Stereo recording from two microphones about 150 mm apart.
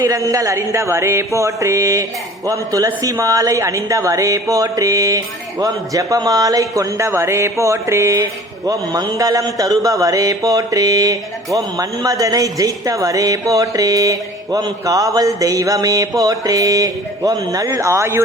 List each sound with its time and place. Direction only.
0.0 s a man's voice: 20° right (ahead or behind)